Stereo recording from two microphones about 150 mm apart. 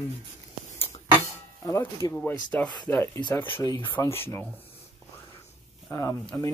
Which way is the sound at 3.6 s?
25° left (ahead or behind).